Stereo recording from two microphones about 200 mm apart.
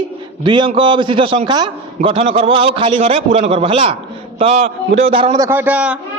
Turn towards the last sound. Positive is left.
turn(degrees=-5)  # may be behind; listen again after turning